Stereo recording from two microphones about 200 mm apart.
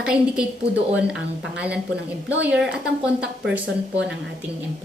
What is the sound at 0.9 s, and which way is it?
A woman's voice, 5° right (ahead or behind).